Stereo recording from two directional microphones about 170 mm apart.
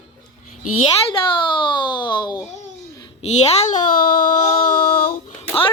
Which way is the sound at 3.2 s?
40° left (ahead or behind).